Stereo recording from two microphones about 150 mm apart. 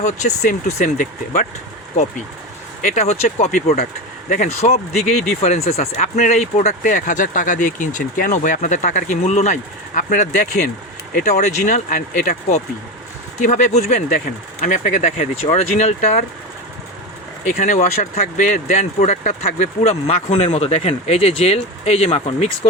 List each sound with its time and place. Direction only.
0.0 s speech: 55° left (ahead or behind)
2.8 s speech: 50° left (ahead or behind)
17.4 s speech: 55° left (ahead or behind)